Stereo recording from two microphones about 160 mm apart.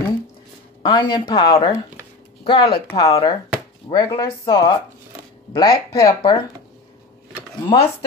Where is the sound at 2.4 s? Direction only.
30° left (ahead or behind).